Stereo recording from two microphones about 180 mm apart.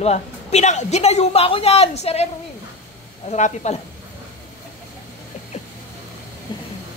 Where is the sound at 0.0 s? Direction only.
35° left (ahead or behind).